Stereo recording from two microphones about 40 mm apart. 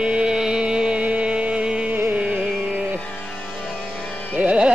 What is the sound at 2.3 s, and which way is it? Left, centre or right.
Carnatic music, right.